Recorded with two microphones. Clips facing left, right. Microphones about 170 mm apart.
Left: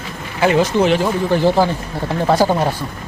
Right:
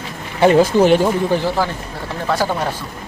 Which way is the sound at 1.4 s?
20° left (ahead or behind).